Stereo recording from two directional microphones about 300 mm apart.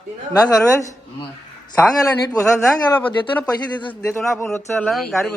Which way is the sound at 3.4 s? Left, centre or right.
Centre.